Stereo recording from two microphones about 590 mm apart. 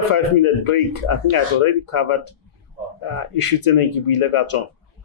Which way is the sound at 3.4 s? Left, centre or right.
Left.